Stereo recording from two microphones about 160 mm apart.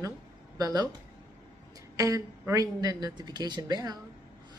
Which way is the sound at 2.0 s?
20° right (ahead or behind).